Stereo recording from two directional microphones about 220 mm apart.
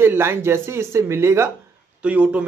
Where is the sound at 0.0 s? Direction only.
10° right (ahead or behind).